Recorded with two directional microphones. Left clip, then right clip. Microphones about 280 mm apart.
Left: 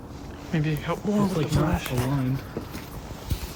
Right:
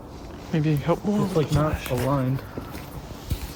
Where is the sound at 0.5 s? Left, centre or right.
Centre.